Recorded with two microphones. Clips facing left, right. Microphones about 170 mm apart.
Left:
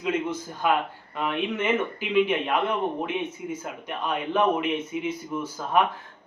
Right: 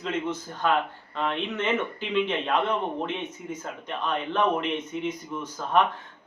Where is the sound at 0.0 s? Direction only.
10° left (ahead or behind).